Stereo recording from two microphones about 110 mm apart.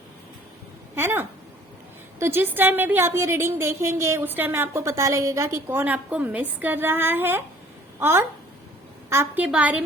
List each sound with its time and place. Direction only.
0.9 s a woman's voice: 20° right (ahead or behind)